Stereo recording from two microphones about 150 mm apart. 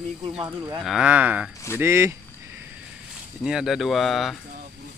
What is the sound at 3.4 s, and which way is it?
Speech, 5° right (ahead or behind).